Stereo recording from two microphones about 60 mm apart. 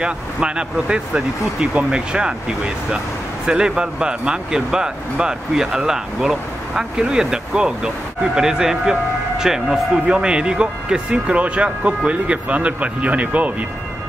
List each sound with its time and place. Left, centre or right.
0.0 s speech: centre